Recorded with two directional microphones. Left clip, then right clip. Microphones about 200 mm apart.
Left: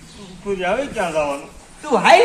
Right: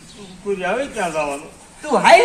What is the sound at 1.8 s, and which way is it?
Speech, 20° right (ahead or behind).